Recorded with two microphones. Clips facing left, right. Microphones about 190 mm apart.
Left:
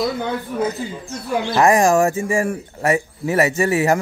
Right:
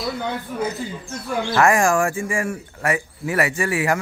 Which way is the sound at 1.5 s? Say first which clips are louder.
Left 3 dB; 20° left (ahead or behind).